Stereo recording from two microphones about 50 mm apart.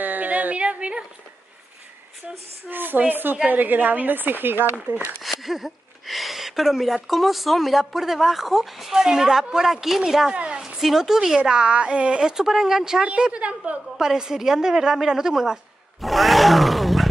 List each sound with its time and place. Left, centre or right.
0.0 s a sound: right
2.7 s a woman's voice: right
4.9 s a woman's voice: right
5.2 s speech: centre
10.3 s a woman's voice: right
10.8 s a woman's voice: centre
13.0 s a woman's voice: right
13.9 s a woman's voice: centre
16.0 s a sound: centre